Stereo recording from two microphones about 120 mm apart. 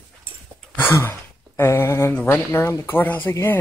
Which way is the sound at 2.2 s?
20° left (ahead or behind).